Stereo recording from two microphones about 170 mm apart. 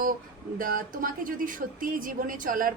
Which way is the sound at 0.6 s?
55° right (ahead or behind).